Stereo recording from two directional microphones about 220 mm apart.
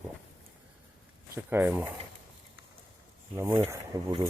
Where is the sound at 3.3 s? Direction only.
10° right (ahead or behind).